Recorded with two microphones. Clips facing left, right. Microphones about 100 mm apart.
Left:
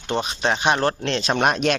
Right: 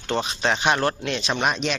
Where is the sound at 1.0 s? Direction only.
40° left (ahead or behind).